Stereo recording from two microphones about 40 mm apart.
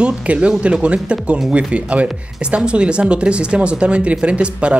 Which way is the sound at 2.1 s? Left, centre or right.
Right.